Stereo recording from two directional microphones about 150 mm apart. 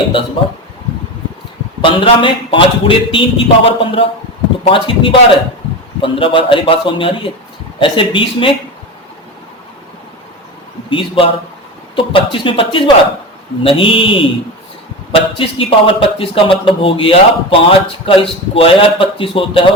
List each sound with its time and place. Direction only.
0.4 s speech: 35° left (ahead or behind)
1.8 s speech: 35° left (ahead or behind)
10.8 s a man's voice: 35° left (ahead or behind)